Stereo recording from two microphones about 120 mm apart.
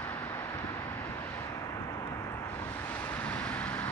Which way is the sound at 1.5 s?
25° left (ahead or behind).